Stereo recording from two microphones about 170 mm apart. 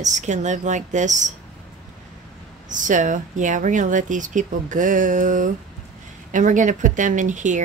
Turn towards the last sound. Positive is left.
turn(degrees=-45)  # may be behind; listen again after turning